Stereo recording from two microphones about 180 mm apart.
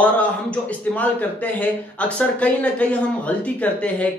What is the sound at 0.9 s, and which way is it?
A man's voice, 10° left (ahead or behind).